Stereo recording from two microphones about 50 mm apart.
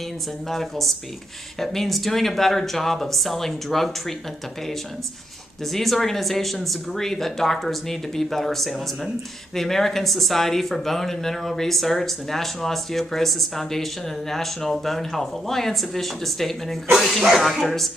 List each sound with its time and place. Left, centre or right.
0.5 s speech: centre
5.7 s speech: centre